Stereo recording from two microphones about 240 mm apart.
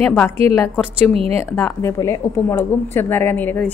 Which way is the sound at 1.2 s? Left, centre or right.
Right.